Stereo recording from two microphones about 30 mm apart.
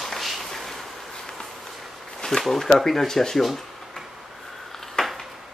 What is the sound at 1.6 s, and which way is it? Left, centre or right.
Walk, centre.